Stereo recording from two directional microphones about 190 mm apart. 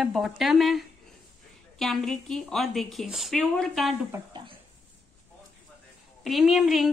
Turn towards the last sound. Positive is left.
turn(degrees=0)  # may be behind; listen again after turning